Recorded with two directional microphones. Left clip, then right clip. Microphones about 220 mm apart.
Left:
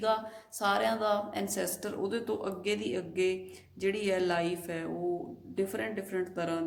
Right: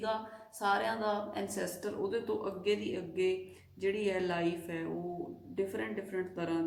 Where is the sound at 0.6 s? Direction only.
45° left (ahead or behind).